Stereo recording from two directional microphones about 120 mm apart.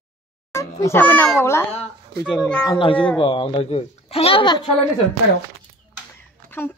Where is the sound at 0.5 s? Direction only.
25° left (ahead or behind).